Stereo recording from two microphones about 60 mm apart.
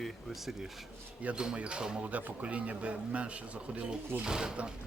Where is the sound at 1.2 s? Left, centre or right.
Centre.